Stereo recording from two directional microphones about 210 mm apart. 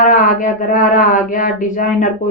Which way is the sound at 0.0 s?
40° left (ahead or behind).